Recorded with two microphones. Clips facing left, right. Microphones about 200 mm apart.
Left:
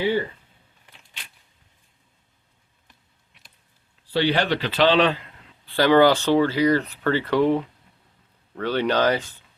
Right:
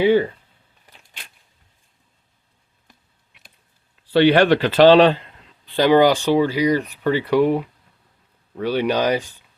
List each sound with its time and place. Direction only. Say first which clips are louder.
4.1 s speech: right 8 dB; 60° right (ahead or behind); by 5.1 s 40° right (ahead or behind)
5.6 s speech: right 2 dB; 20° right (ahead or behind)